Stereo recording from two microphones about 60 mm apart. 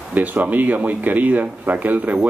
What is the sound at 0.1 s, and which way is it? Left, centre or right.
Speech, right.